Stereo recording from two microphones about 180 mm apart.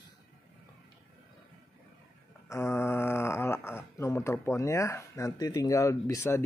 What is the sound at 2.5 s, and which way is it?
Speech, 15° left (ahead or behind).